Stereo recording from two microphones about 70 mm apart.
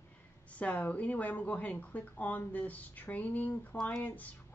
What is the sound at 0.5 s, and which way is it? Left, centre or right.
Speech, left.